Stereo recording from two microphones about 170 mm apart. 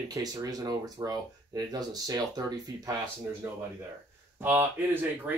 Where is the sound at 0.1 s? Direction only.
20° right (ahead or behind).